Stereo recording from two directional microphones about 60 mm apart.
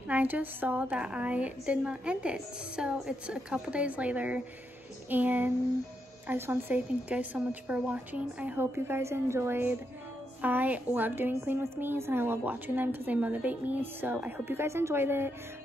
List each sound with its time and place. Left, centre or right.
0.1 s speech: right
0.9 s speech: centre
6.2 s a woman's voice: right
7.1 s speech: right
8.7 s a woman's voice: right
14.4 s a woman's voice: right